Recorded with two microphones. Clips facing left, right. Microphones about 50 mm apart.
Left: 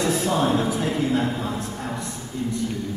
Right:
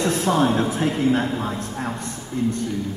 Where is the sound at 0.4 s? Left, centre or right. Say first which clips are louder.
Right 2 dB; right.